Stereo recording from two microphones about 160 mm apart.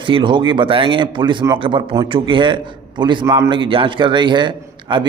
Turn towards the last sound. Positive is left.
turn(degrees=-30)  # may be behind; listen again after turning